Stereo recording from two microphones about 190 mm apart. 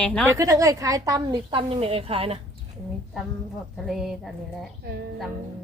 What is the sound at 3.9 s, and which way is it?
Speech, centre (ahead or behind).